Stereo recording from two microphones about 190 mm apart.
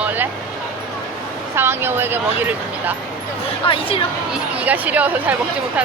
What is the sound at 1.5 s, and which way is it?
Speech, 10° right (ahead or behind).